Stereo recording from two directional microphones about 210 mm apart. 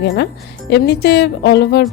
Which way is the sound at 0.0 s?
55° left (ahead or behind).